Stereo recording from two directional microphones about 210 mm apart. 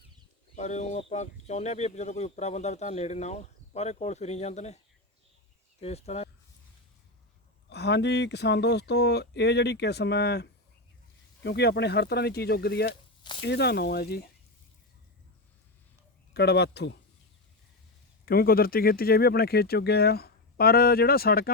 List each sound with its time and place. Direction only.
0.5 s speech: 35° left (ahead or behind)
5.8 s speech: 30° left (ahead or behind)
7.7 s speech: 55° left (ahead or behind)
11.4 s speech: 55° left (ahead or behind)
16.3 s speech: 55° left (ahead or behind)
18.3 s speech: 45° left (ahead or behind)